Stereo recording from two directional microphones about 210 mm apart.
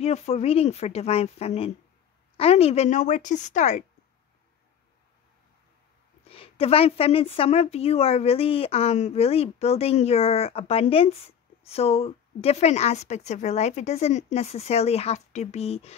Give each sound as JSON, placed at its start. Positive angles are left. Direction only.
{"t": 0.0, "sound": "a woman's voice", "side_deg": 30}
{"t": 6.2, "sound": "a woman's voice", "side_deg": 25}